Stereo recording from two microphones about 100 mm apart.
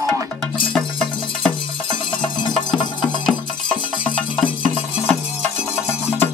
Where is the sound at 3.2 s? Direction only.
10° left (ahead or behind).